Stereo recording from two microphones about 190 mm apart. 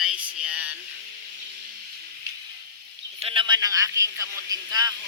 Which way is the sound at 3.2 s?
30° right (ahead or behind).